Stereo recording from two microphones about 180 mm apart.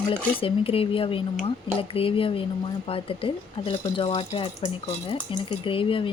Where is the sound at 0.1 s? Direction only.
30° left (ahead or behind).